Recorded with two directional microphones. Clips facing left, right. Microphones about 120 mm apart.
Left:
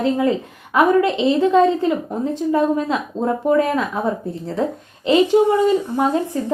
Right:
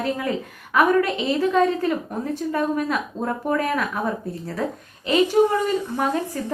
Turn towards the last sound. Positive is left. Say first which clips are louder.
# left 5 dB
turn(degrees=25)  # may be behind; listen again after turning